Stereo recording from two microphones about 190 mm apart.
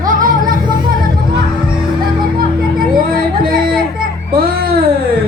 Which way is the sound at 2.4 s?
50° right (ahead or behind).